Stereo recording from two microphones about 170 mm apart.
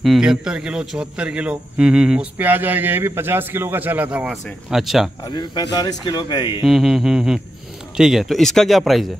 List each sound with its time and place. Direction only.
0.0 s a man's voice: centre (ahead or behind)
5.2 s speech: 25° left (ahead or behind)
6.6 s speech: centre (ahead or behind)